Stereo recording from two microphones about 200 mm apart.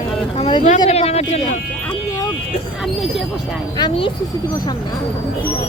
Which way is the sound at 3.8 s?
25° left (ahead or behind).